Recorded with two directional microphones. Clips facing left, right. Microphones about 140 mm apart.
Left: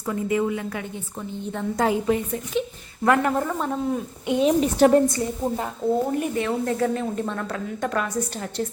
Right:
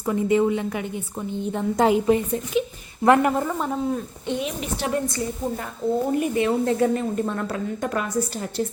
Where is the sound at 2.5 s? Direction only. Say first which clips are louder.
Right 2 dB; 5° right (ahead or behind).